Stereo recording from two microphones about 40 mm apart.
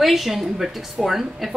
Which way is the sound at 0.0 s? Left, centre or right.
Centre.